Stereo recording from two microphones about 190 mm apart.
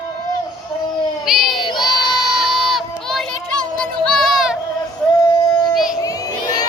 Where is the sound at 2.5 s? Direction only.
Centre (ahead or behind).